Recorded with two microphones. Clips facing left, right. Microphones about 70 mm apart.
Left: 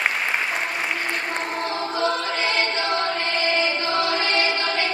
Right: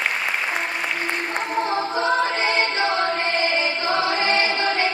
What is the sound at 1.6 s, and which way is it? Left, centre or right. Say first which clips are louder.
Music: right 3 dB; right.